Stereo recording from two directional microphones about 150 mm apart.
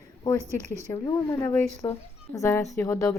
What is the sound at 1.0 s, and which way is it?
A woman's voice, 20° left (ahead or behind).